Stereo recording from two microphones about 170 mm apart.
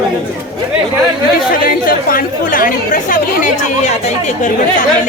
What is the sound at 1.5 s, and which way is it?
Speech, 55° left (ahead or behind).